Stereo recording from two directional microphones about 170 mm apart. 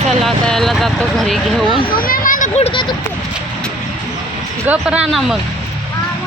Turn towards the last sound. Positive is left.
turn(degrees=0)  # may be behind; listen again after turning